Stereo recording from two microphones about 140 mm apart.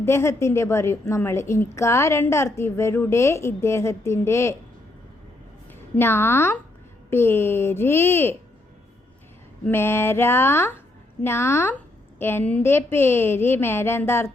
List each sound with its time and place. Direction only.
0.0 s a woman's voice: 20° left (ahead or behind)
6.0 s a woman's voice: 15° left (ahead or behind)
9.6 s a woman's voice: 15° left (ahead or behind)